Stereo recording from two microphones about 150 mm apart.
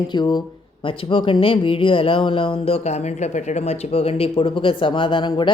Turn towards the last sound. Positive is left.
turn(degrees=30)  # may be behind; listen again after turning